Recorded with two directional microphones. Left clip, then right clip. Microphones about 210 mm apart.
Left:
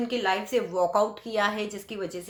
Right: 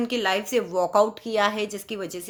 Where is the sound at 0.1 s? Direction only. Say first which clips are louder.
Right 1 dB; 40° right (ahead or behind).